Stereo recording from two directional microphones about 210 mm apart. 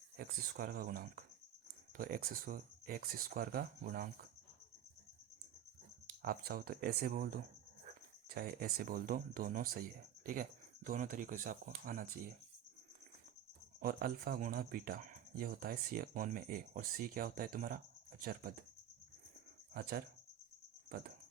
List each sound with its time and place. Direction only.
0.2 s speech: 45° right (ahead or behind)
6.1 s speech: 45° right (ahead or behind)
8.3 s speech: 45° right (ahead or behind)
13.7 s speech: 45° right (ahead or behind)
19.7 s speech: 45° right (ahead or behind)